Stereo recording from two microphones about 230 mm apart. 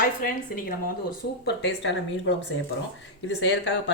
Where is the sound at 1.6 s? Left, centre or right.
Left.